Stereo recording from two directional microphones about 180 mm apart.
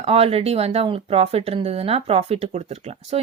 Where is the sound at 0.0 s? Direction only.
35° right (ahead or behind).